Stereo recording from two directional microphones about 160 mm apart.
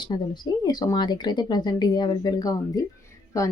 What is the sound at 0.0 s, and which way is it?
Speech, 25° left (ahead or behind).